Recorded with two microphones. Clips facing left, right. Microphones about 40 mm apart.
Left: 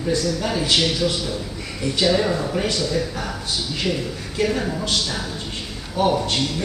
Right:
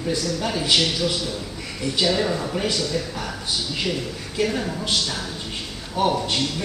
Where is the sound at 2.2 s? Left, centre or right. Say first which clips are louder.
Left 2 dB; centre.